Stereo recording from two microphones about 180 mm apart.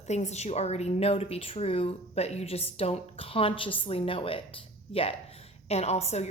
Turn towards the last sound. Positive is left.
turn(degrees=35)  # may be behind; listen again after turning